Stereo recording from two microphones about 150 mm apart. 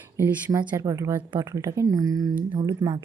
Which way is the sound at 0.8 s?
20° right (ahead or behind).